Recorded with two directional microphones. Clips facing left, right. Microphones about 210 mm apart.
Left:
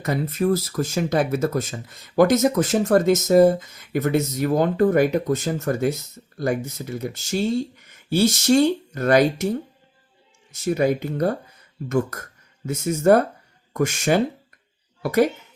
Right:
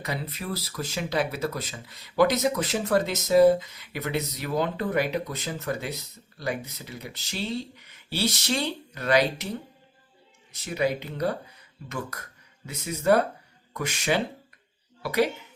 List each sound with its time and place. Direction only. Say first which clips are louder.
0.0 s speech: left 11 dB; 45° left (ahead or behind)